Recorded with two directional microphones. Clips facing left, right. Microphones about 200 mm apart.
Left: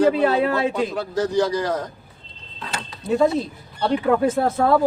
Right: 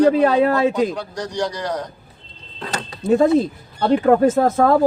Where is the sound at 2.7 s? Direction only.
45° right (ahead or behind).